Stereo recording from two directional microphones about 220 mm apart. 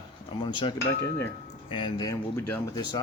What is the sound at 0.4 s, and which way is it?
Speech, 20° left (ahead or behind).